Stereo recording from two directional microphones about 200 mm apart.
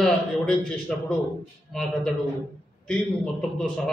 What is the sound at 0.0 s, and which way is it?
A man's voice, 5° left (ahead or behind).